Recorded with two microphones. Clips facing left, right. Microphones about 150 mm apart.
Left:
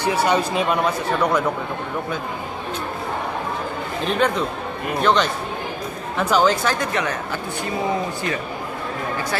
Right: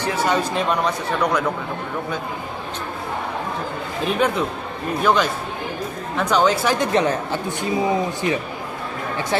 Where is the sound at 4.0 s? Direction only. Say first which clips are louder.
Even; 5° right (ahead or behind).